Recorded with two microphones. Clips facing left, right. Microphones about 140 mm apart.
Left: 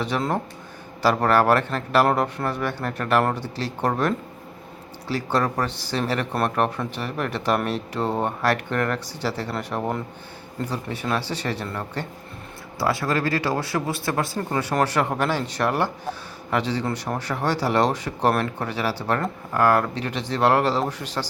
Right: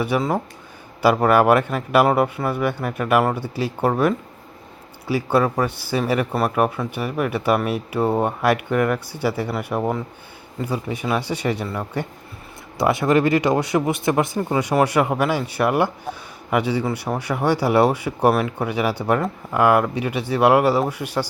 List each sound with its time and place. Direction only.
0.0 s speech: 5° right (ahead or behind)
12.8 s speech: 20° right (ahead or behind)